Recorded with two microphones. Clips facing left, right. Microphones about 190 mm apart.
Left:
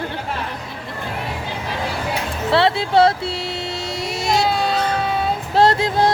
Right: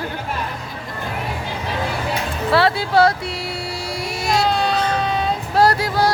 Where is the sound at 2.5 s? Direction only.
25° left (ahead or behind).